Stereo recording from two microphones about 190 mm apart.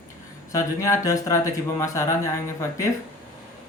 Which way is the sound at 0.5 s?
15° left (ahead or behind).